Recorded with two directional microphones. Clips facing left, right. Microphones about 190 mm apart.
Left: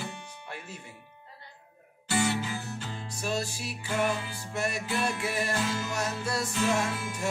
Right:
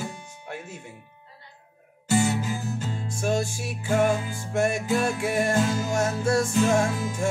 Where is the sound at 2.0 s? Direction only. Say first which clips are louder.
Right 5 dB; 45° right (ahead or behind).